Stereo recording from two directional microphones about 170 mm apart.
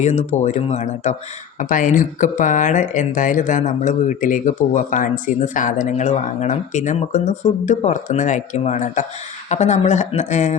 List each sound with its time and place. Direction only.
0.0 s speech: 45° left (ahead or behind)